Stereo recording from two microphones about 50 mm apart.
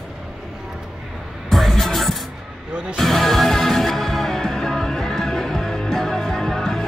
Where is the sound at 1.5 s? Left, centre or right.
Centre.